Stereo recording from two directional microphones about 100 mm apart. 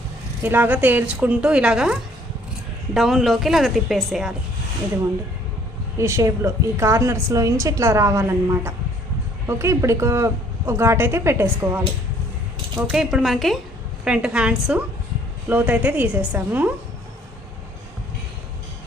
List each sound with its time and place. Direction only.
0.4 s a woman's voice: 20° right (ahead or behind); by 4.4 s 5° right (ahead or behind)
6.0 s a woman's voice: 30° right (ahead or behind)
12.9 s a woman's voice: 5° right (ahead or behind)
14.0 s a woman's voice: 10° right (ahead or behind)